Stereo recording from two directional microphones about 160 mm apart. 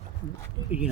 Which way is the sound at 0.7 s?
5° right (ahead or behind).